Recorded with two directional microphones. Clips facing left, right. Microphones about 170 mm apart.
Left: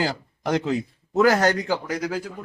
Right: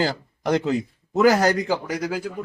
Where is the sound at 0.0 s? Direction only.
Centre (ahead or behind).